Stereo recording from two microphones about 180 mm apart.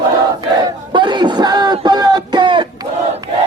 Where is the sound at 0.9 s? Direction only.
25° right (ahead or behind).